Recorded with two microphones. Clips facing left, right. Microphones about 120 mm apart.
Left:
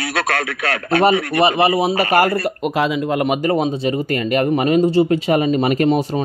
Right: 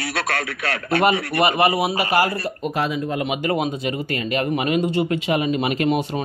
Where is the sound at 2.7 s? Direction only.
80° left.